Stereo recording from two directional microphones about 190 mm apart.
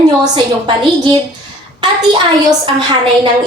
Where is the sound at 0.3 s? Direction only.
25° right (ahead or behind).